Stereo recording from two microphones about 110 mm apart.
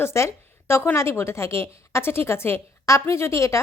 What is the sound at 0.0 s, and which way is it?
A woman's voice, 25° left (ahead or behind).